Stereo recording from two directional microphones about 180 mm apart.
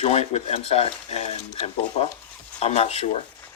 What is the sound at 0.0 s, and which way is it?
Speech, 35° left (ahead or behind).